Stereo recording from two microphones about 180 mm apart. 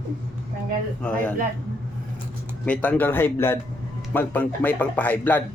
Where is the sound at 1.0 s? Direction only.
10° left (ahead or behind).